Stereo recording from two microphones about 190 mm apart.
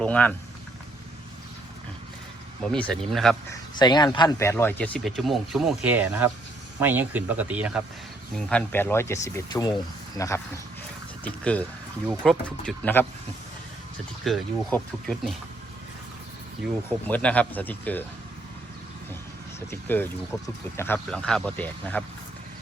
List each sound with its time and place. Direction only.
0.0 s speech: 5° left (ahead or behind)
2.7 s speech: 5° left (ahead or behind)
3.8 s a man's voice: 20° left (ahead or behind); by 7.9 s 5° right (ahead or behind)
8.4 s speech: 5° left (ahead or behind)
14.3 s speech: centre (ahead or behind)
17.1 s speech: 10° left (ahead or behind)
19.5 s speech: 10° left (ahead or behind)